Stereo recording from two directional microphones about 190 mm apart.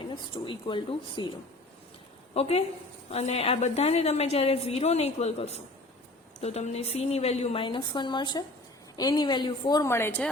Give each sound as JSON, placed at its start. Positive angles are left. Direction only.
{"t": 0.0, "sound": "a woman's voice", "side_deg": 25}
{"t": 2.3, "sound": "a woman's voice", "side_deg": 30}